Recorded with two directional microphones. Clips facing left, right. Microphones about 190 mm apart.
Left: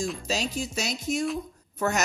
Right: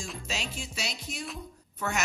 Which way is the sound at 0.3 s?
40° left (ahead or behind).